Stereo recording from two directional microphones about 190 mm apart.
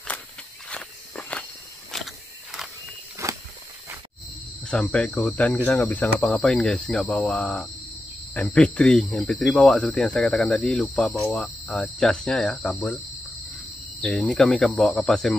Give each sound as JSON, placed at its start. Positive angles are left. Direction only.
{"t": 0.7, "sound": "walk", "side_deg": 5}
{"t": 1.9, "sound": "vehicle", "side_deg": 0}
{"t": 3.2, "sound": "walk", "side_deg": -15}
{"t": 4.6, "sound": "speech", "side_deg": 5}
{"t": 14.0, "sound": "speech", "side_deg": 0}